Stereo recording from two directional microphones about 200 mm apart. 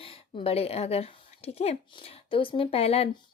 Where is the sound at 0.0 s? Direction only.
30° left (ahead or behind).